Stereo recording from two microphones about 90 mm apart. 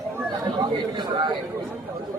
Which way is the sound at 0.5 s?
55° right (ahead or behind).